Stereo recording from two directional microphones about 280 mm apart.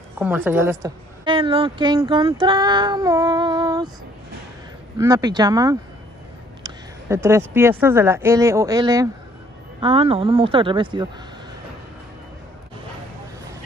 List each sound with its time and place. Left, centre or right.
0.2 s a woman's voice: centre
4.9 s a woman's voice: centre